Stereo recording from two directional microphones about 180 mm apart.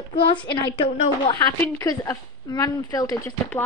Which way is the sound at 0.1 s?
25° left (ahead or behind).